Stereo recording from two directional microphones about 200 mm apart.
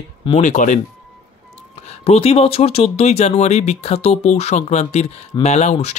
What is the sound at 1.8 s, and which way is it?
Speech, 30° left (ahead or behind).